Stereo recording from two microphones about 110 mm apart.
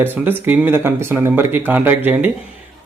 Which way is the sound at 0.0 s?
20° right (ahead or behind).